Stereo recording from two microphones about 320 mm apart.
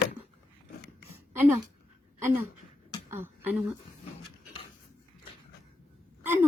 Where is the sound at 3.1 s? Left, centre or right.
Centre.